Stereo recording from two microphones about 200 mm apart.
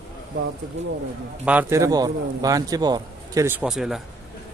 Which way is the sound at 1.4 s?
10° right (ahead or behind).